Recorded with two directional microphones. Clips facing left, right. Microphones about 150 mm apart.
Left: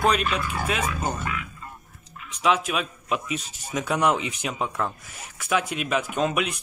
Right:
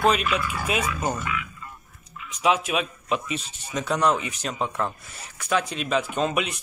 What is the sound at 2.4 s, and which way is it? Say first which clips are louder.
Speech: right 1 dB; centre (ahead or behind).